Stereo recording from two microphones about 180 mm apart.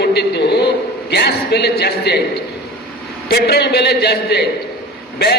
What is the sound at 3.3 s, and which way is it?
A man's voice, 65° left (ahead or behind).